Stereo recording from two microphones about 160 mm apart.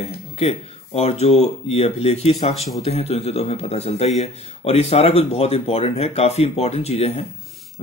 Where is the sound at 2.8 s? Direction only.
40° left (ahead or behind).